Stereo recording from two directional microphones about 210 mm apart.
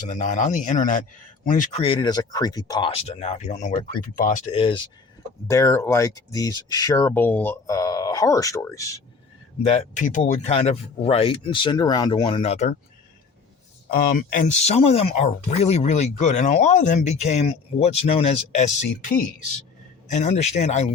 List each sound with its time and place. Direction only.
0.1 s speech: 35° left (ahead or behind)
1.8 s speech: 25° left (ahead or behind)
5.5 s speech: 15° left (ahead or behind)
9.6 s speech: 35° left (ahead or behind)
13.8 s speech: 45° left (ahead or behind)